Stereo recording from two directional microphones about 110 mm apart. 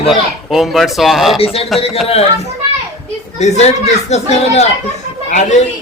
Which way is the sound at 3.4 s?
90° left.